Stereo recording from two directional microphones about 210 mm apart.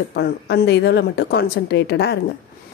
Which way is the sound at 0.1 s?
50° left (ahead or behind).